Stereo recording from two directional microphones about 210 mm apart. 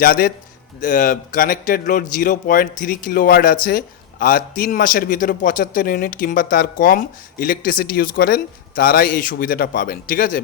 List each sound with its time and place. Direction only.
0.0 s a man's voice: 45° left (ahead or behind)